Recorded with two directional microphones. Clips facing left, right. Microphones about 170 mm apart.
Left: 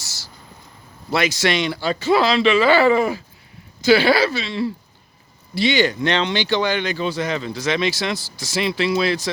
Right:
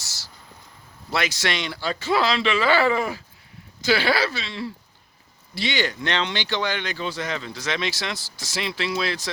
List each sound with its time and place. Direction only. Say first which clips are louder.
1.1 s speech: left 6 dB; 5° left (ahead or behind)
5.7 s speech: left 5 dB; 15° left (ahead or behind)